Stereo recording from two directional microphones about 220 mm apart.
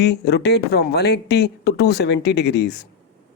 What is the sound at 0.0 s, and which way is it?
Speech, 50° left (ahead or behind).